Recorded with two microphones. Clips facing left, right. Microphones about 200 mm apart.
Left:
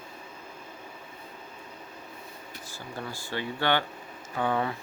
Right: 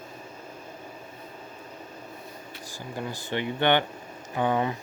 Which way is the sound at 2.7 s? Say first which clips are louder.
Right 4 dB; 15° right (ahead or behind).